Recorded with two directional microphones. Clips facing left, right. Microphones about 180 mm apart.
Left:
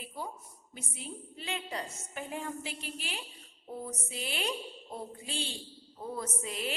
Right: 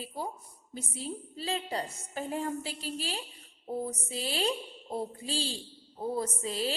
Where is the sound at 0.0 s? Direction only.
35° right (ahead or behind).